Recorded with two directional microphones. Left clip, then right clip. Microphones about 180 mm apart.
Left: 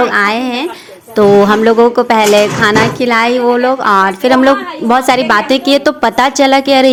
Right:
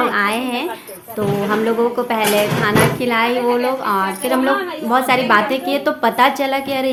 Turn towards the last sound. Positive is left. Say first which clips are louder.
# left 11 dB
turn(degrees=45)  # may be behind; listen again after turning